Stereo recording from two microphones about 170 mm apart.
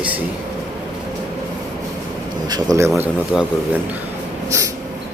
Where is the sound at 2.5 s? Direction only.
20° right (ahead or behind).